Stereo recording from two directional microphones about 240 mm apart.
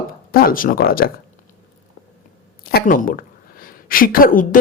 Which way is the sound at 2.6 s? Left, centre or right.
Left.